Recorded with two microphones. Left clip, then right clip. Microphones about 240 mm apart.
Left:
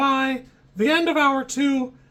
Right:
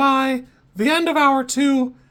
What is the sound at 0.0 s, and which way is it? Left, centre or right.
Speech, right.